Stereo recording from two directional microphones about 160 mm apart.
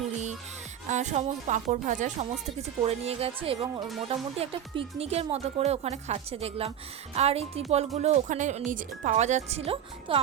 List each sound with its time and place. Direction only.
0.9 s speech: 45° right (ahead or behind)
2.6 s speech: 40° right (ahead or behind)